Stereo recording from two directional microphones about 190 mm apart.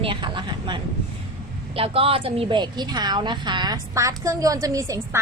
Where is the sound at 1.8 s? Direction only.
30° right (ahead or behind).